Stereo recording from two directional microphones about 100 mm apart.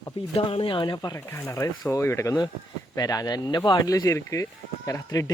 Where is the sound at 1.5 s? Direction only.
30° left (ahead or behind).